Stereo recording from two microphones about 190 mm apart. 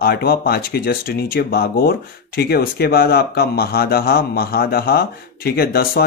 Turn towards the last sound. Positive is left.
turn(degrees=55)  # may be behind; listen again after turning